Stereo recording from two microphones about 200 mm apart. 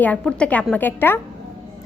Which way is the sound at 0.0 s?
5° left (ahead or behind).